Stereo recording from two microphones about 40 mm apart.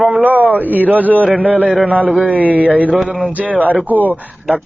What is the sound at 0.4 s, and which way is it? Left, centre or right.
A man's voice, right.